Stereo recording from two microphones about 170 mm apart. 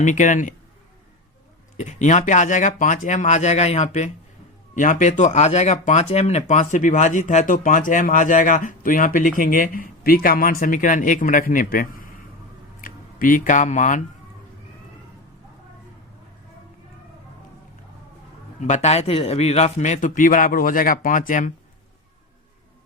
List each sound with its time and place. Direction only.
0.0 s speech: 45° left (ahead or behind)
1.7 s speech: 45° left (ahead or behind)
18.6 s speech: 40° left (ahead or behind)